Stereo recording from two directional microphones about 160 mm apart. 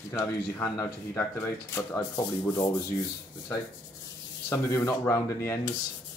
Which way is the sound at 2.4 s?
20° left (ahead or behind).